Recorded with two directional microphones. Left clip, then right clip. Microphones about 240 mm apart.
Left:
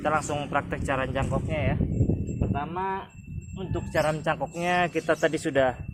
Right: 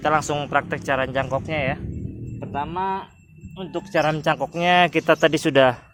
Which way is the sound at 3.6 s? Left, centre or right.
Right.